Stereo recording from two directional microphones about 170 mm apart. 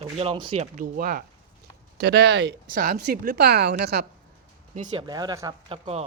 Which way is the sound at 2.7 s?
65° right (ahead or behind).